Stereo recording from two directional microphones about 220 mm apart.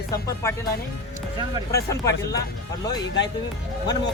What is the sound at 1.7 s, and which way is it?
Speech, 15° left (ahead or behind).